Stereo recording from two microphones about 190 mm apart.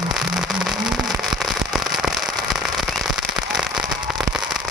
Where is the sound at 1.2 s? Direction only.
Centre (ahead or behind).